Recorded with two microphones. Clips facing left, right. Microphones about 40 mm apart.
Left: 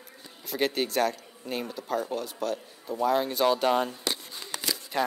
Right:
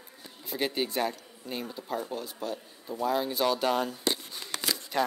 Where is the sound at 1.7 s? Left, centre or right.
Left.